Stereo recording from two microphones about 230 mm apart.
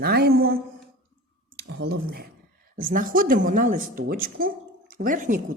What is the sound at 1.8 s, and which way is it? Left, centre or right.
A woman's voice, right.